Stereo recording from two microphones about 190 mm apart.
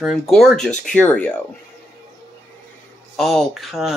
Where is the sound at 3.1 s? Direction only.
Centre (ahead or behind).